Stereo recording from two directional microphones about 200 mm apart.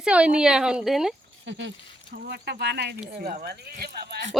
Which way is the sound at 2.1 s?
60° right (ahead or behind).